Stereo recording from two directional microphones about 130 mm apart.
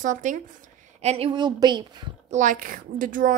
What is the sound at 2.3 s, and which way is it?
A woman's voice, 75° right (ahead or behind).